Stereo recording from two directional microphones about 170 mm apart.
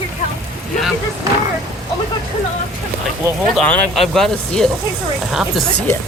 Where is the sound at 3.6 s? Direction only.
5° left (ahead or behind).